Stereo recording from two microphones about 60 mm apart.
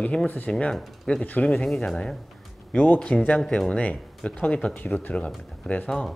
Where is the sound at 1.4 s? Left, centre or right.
Centre.